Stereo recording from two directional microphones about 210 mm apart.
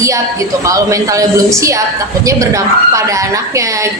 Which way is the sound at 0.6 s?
15° right (ahead or behind).